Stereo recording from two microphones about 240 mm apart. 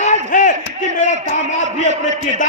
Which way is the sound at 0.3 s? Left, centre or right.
Left.